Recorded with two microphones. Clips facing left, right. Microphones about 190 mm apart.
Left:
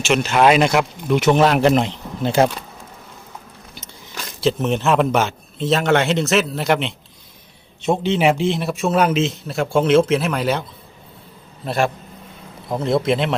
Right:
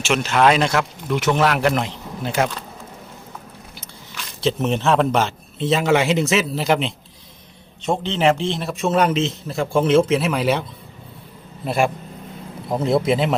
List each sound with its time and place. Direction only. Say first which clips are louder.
0.0 s speech: left 2 dB; centre (ahead or behind); by 2.5 s 30° left (ahead or behind)
4.4 s a man's voice: left 1 dB; 5° left (ahead or behind)
7.8 s a man's voice: left 3 dB; 10° left (ahead or behind)
11.6 s a man's voice: even; 10° right (ahead or behind)